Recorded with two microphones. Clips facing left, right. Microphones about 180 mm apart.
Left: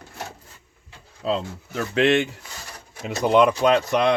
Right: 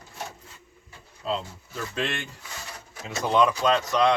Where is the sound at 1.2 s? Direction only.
75° left (ahead or behind).